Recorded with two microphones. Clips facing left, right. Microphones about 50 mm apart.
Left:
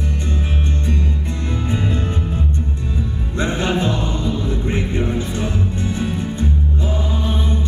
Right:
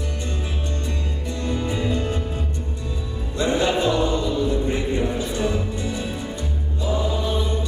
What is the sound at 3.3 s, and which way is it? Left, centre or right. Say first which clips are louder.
Music: even; left.